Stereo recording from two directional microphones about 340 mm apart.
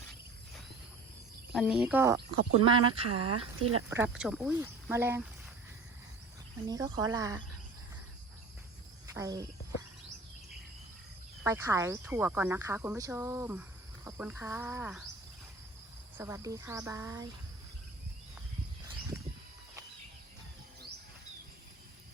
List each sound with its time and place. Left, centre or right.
1.5 s speech: centre
3.6 s speech: right
3.8 s speech: centre
6.7 s speech: centre
9.1 s speech: centre
11.4 s speech: centre
16.1 s speech: centre